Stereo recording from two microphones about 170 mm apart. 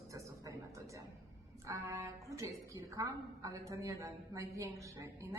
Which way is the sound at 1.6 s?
20° right (ahead or behind).